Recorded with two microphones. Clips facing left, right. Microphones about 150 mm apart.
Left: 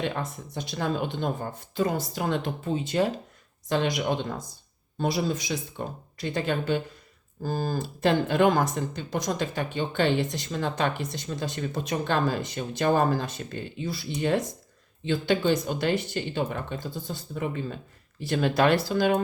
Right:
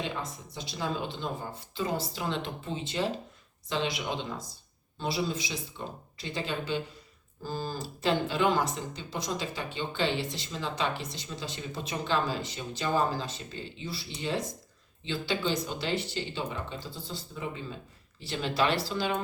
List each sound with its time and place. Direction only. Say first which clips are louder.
0.5 s speech: left 5 dB; 55° left (ahead or behind)